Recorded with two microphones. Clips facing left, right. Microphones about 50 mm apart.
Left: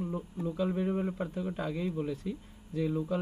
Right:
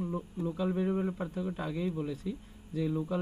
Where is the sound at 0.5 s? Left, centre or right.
Left.